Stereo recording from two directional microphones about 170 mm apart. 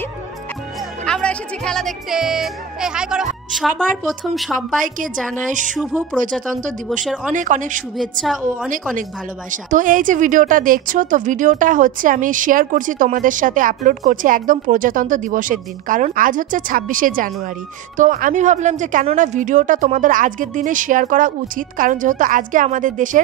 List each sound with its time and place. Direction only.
1.0 s speech: 5° left (ahead or behind)
4.8 s a woman's voice: 50° right (ahead or behind)
7.3 s a woman's voice: 50° right (ahead or behind)
8.0 s speech: centre (ahead or behind)
9.5 s a woman's voice: 50° right (ahead or behind)